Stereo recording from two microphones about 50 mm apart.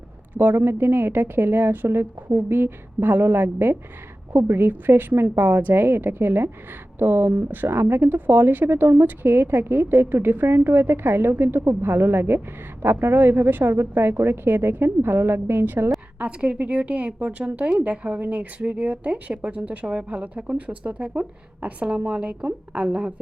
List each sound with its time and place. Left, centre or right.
0.3 s a woman's voice: right
4.7 s a woman's voice: right
7.5 s a woman's voice: right
13.7 s a woman's voice: right
16.1 s speech: right